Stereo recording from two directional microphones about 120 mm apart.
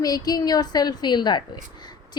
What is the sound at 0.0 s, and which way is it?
A woman's voice, 30° left (ahead or behind).